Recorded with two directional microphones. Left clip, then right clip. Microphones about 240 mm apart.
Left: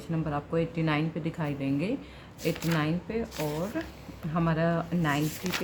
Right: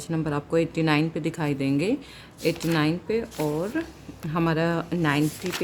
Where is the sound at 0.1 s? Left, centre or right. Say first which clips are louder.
Right 5 dB; right.